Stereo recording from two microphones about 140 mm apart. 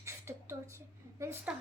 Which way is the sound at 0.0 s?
20° right (ahead or behind).